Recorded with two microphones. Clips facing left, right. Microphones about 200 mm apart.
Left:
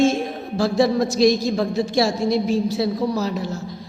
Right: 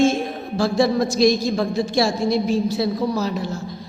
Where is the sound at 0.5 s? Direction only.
35° left (ahead or behind).